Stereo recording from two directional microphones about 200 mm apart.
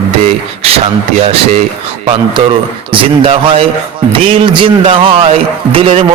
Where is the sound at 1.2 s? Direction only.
30° right (ahead or behind).